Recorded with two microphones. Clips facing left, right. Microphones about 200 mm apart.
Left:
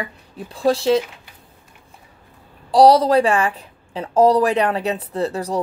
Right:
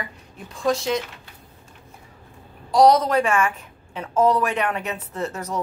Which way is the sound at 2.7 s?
30° left (ahead or behind).